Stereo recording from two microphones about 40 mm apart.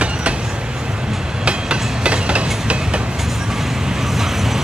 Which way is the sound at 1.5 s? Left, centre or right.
Right.